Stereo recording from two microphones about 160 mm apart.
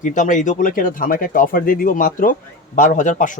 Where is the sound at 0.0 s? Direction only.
55° left (ahead or behind).